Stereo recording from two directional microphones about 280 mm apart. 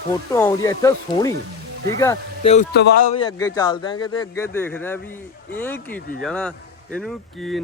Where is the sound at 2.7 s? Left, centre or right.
Left.